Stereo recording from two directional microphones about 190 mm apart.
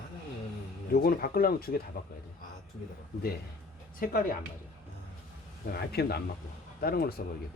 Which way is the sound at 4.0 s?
50° left (ahead or behind).